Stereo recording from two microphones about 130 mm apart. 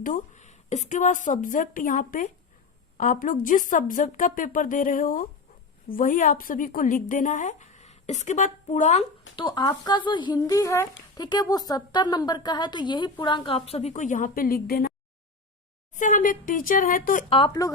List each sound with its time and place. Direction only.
0.0 s a woman's voice: 80° left
9.3 s a woman's voice: 35° left (ahead or behind); by 14.8 s 90° left
16.0 s a woman's voice: 85° left
17.2 s speech: 45° left (ahead or behind)